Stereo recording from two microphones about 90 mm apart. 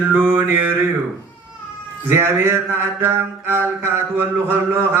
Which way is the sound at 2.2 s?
25° right (ahead or behind).